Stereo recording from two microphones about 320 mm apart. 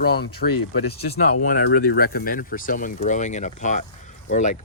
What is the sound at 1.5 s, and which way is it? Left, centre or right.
Speech, left.